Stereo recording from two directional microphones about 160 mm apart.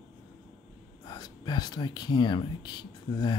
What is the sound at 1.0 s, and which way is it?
Speech, 25° left (ahead or behind).